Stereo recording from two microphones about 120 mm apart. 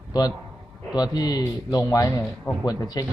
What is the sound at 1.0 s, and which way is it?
A man's voice, 35° left (ahead or behind).